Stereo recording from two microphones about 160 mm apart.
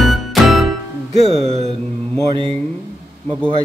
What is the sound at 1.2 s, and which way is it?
Music, 40° right (ahead or behind).